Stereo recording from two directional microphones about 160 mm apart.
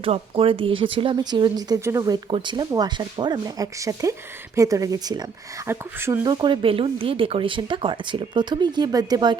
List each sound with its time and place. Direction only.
0.0 s speech: 35° right (ahead or behind); by 2.1 s 20° right (ahead or behind)
2.3 s speech: 30° right (ahead or behind)